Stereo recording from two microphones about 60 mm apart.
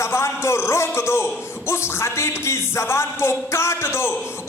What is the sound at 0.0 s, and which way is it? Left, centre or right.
A man's voice, left.